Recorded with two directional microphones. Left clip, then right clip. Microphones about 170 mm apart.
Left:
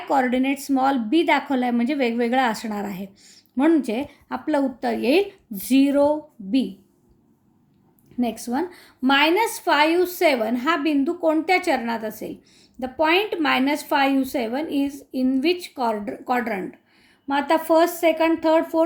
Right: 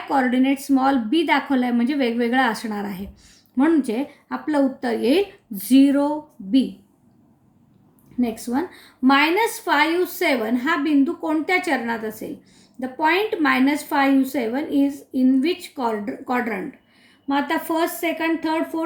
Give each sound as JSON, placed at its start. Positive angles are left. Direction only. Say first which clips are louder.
{"t": 0.1, "sound": "a woman's voice", "louder": "right 1 dB", "side_deg": 40}
{"t": 8.2, "sound": "a woman's voice", "louder": "right 1 dB", "side_deg": 50}